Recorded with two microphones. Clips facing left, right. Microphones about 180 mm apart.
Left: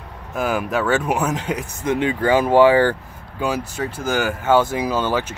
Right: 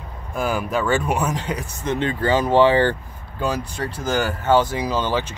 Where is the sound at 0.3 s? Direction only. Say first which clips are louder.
Left 1 dB; centre (ahead or behind).